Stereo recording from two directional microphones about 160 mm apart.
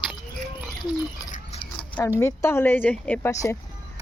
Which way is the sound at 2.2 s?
15° left (ahead or behind).